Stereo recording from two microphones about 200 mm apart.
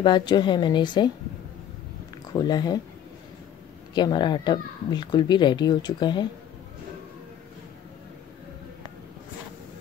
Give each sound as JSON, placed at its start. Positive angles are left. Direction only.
{"t": 0.0, "sound": "speech", "side_deg": 20}
{"t": 2.3, "sound": "speech", "side_deg": 20}
{"t": 3.9, "sound": "speech", "side_deg": 20}